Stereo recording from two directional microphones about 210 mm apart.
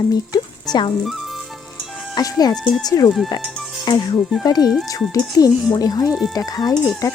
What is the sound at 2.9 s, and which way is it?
Speech, 15° left (ahead or behind).